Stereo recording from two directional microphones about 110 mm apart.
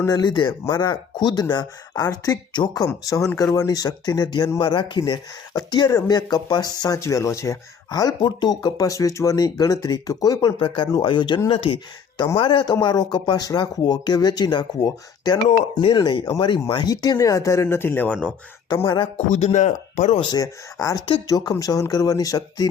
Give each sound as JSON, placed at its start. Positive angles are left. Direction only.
{"t": 0.1, "sound": "speech", "side_deg": 40}
{"t": 10.6, "sound": "speech", "side_deg": 50}
{"t": 12.6, "sound": "speech", "side_deg": 40}
{"t": 19.1, "sound": "speech", "side_deg": 80}
{"t": 20.2, "sound": "speech", "side_deg": 35}